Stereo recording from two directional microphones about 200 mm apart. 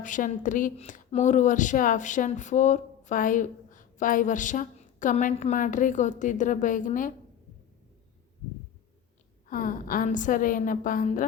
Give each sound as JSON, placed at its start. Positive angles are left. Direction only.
{"t": 0.0, "sound": "speech", "side_deg": 40}
{"t": 9.5, "sound": "a woman's voice", "side_deg": 45}